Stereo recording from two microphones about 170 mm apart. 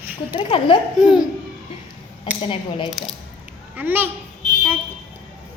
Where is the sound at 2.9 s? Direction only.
Centre (ahead or behind).